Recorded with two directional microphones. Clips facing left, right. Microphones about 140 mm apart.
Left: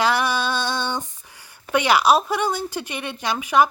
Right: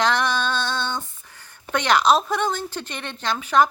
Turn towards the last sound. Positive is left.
turn(degrees=10)  # may be behind; listen again after turning